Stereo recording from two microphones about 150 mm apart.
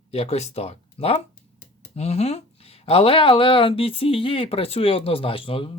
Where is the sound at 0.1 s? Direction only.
45° left (ahead or behind).